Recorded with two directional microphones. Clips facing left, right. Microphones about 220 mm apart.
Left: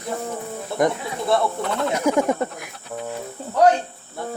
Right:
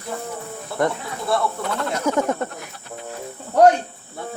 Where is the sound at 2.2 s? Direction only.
Centre (ahead or behind).